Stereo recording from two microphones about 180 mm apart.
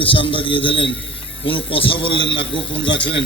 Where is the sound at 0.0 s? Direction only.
30° left (ahead or behind).